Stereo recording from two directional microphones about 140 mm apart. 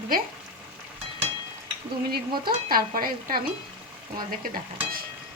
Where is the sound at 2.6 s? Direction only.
90° right.